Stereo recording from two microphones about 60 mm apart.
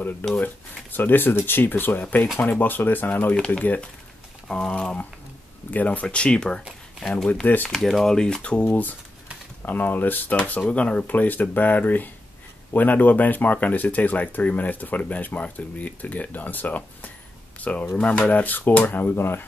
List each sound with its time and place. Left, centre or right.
0.2 s speech: left
3.3 s speech: left
4.5 s speech: centre
5.7 s speech: left
6.0 s speech: centre
7.4 s speech: left
7.7 s speech: centre
9.6 s speech: left
10.7 s speech: left